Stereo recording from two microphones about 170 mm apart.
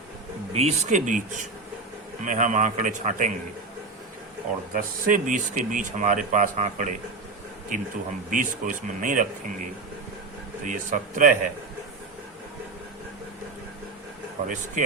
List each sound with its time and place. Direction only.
0.5 s speech: 40° right (ahead or behind)
2.2 s speech: 45° right (ahead or behind)
4.7 s speech: 50° right (ahead or behind)
10.7 s speech: 50° right (ahead or behind)
14.4 s speech: 50° right (ahead or behind)